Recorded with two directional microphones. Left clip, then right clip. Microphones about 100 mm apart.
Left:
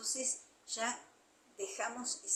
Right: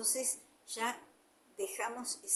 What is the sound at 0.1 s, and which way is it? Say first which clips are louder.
A woman's voice: right 1 dB; 45° right (ahead or behind).